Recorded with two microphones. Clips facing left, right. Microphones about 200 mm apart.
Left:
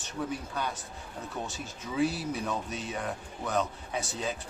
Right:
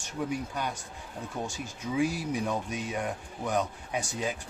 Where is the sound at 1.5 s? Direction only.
15° right (ahead or behind).